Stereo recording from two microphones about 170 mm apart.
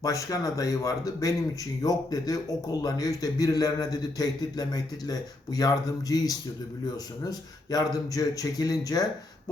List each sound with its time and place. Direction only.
0.0 s speech: 20° left (ahead or behind)